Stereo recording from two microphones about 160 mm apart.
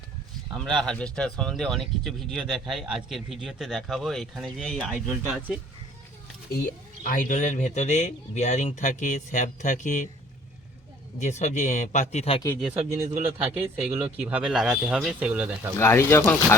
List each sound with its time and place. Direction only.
0.6 s speech: centre (ahead or behind)
7.0 s speech: 55° left (ahead or behind)
11.2 s speech: 45° left (ahead or behind)
13.2 s a man's voice: 10° right (ahead or behind)
15.8 s speech: 15° left (ahead or behind)